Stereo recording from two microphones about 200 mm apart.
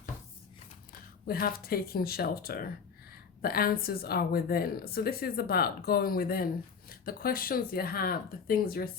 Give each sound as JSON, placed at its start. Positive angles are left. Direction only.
{"t": 1.3, "sound": "a woman's voice", "side_deg": 50}